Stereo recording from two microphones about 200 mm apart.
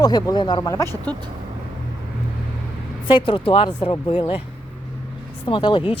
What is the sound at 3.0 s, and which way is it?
Speech, 25° left (ahead or behind).